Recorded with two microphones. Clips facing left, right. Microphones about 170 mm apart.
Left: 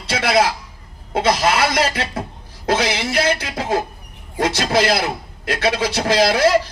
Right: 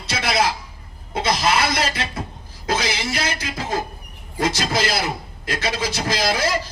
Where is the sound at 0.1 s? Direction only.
55° left (ahead or behind).